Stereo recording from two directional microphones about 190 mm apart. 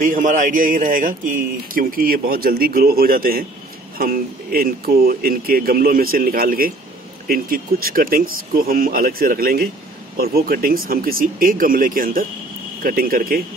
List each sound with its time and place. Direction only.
0.0 s speech: 45° right (ahead or behind)